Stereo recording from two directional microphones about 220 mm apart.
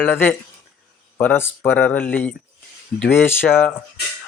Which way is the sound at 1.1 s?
10° left (ahead or behind).